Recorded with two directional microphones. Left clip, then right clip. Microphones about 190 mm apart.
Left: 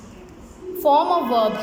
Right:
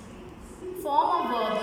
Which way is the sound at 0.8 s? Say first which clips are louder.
Left 7 dB; 55° left (ahead or behind).